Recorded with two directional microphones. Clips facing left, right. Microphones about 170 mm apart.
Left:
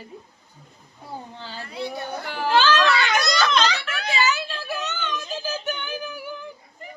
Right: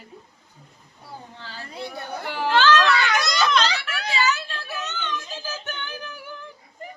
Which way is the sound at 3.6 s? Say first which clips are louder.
Left 2 dB; 35° right (ahead or behind).